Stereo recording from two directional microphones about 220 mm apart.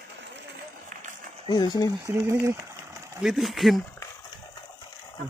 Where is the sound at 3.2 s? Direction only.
Centre (ahead or behind).